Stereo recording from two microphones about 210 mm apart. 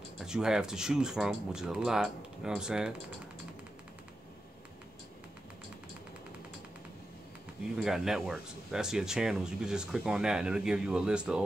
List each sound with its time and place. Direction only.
0.2 s speech: 5° right (ahead or behind)
7.7 s speech: centre (ahead or behind)